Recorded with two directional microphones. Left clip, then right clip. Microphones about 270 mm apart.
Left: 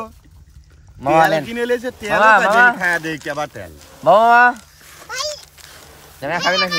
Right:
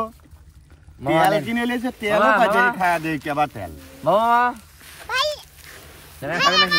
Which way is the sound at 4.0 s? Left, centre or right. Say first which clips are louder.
Left 7 dB; left.